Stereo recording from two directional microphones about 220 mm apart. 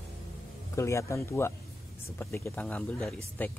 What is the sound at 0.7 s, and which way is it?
Speech, 15° left (ahead or behind).